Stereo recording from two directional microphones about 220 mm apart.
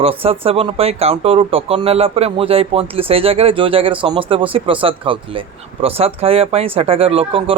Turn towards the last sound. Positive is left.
turn(degrees=-25)  # may be behind; listen again after turning